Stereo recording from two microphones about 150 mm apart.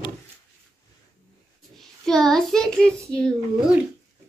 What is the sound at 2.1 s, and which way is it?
A child's voice, 5° left (ahead or behind).